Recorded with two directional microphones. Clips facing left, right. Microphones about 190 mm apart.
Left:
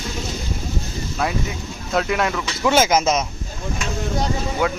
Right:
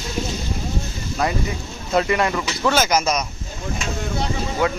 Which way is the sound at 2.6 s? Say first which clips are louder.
Left 3 dB; 25° left (ahead or behind).